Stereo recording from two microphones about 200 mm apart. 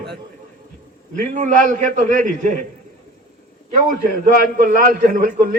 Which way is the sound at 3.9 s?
40° right (ahead or behind).